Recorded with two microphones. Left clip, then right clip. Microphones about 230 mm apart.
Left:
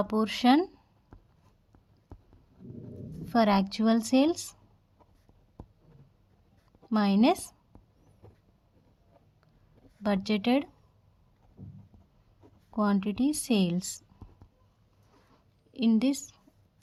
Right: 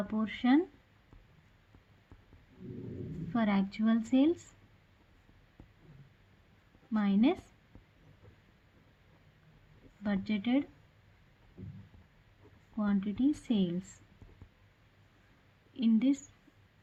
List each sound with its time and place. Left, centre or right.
0.1 s speech: left
3.3 s a woman's voice: left
6.9 s a woman's voice: left
10.0 s a woman's voice: left
12.7 s a woman's voice: left
15.8 s a woman's voice: left